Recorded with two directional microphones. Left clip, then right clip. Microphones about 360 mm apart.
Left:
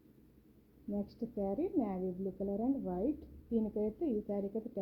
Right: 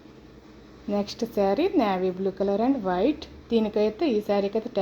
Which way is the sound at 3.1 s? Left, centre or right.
Centre.